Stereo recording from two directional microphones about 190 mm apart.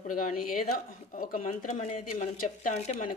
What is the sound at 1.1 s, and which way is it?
Speech, 45° left (ahead or behind).